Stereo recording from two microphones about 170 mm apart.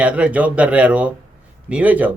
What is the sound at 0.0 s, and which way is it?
Speech, 10° right (ahead or behind).